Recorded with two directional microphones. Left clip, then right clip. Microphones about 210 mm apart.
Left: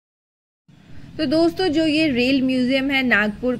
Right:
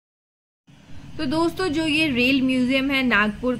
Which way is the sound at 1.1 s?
10° left (ahead or behind).